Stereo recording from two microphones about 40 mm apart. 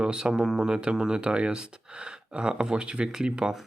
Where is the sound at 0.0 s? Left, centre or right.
Right.